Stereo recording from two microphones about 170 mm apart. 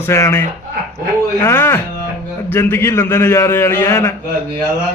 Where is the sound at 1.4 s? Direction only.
15° left (ahead or behind).